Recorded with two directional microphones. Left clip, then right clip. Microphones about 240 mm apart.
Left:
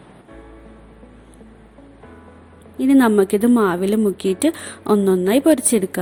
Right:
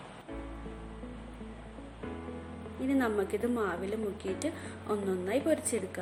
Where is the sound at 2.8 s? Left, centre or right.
Left.